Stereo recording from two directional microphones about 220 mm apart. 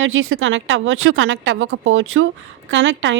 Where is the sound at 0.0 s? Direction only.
60° right (ahead or behind).